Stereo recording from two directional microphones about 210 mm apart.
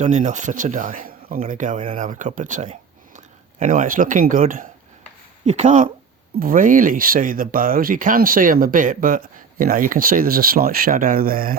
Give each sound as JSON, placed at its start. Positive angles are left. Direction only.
{"t": 0.0, "sound": "speech", "side_deg": -35}